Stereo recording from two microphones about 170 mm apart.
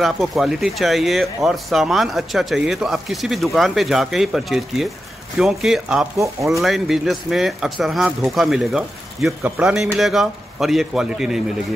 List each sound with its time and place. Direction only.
0.0 s speech: centre (ahead or behind)
6.1 s speech: 20° right (ahead or behind)
6.6 s speech: centre (ahead or behind)